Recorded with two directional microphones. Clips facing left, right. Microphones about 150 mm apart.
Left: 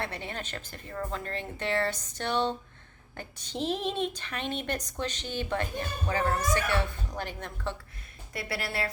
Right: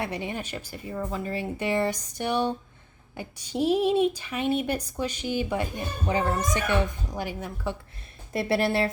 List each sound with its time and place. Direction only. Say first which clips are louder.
0.0 s speech: right 5 dB; 15° right (ahead or behind)
8.3 s a woman's voice: right 11 dB; 25° right (ahead or behind)